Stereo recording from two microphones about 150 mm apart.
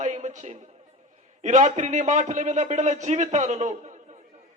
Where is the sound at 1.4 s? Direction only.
55° right (ahead or behind).